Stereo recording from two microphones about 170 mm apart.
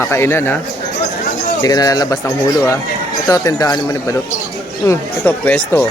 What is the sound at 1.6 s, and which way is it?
Speech, 20° left (ahead or behind).